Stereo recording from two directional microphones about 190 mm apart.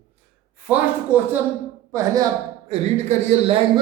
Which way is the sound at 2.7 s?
35° right (ahead or behind).